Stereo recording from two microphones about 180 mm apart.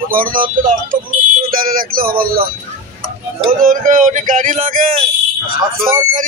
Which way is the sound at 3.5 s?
50° right (ahead or behind).